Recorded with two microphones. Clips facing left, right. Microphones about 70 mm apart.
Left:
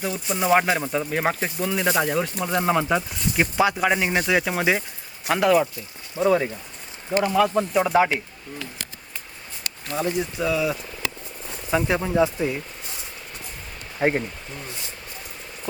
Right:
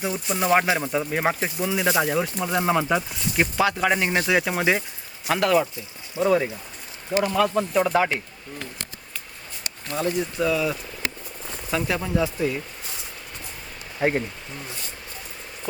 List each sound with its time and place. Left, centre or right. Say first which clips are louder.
0.0 s speech: even; centre
3.6 s speech: left 2 dB; centre
3.8 s speech: even; centre
10.0 s speech: right 1 dB; centre
11.7 s speech: left 3 dB; left
14.0 s speech: left 1 dB; left